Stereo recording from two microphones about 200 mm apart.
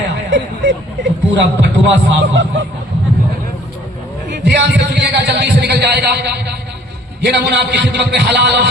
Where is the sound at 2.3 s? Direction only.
70° right (ahead or behind).